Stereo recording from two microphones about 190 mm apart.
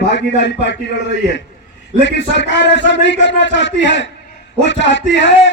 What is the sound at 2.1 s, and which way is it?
A man's voice, 70° left (ahead or behind).